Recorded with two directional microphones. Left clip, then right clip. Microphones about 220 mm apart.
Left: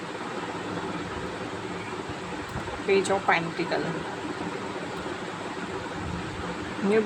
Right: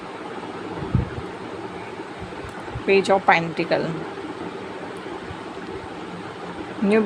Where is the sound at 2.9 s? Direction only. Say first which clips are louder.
Right 6 dB; 30° right (ahead or behind).